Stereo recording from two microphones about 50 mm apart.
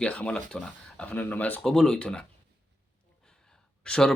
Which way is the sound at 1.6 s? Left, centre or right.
Centre.